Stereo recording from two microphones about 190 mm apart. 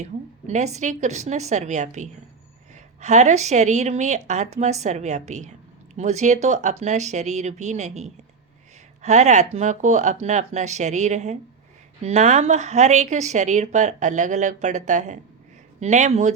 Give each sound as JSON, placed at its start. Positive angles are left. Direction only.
{"t": 0.0, "sound": "a woman's voice", "side_deg": -35}